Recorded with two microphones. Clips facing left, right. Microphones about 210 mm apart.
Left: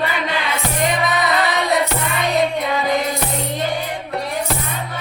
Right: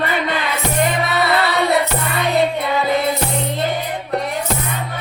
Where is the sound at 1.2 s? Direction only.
15° left (ahead or behind).